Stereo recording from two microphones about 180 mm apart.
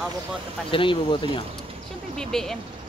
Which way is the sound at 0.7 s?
30° left (ahead or behind).